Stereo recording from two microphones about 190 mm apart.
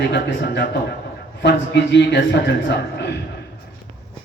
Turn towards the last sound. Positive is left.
turn(degrees=65)  # may be behind; listen again after turning